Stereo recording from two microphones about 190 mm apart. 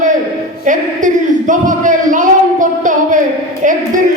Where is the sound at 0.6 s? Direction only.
40° right (ahead or behind).